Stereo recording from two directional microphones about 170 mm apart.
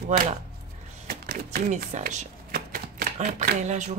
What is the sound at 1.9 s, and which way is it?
Shuffling cards, 50° right (ahead or behind).